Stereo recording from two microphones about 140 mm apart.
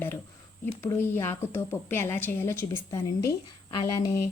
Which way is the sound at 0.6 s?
20° left (ahead or behind).